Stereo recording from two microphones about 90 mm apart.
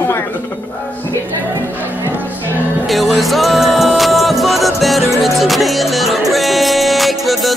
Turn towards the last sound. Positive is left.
turn(degrees=0)  # may be behind; listen again after turning